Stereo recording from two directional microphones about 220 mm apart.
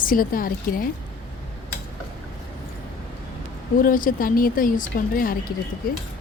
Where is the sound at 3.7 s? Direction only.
40° left (ahead or behind).